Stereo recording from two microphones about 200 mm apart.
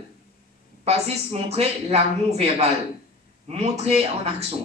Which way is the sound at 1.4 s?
30° right (ahead or behind).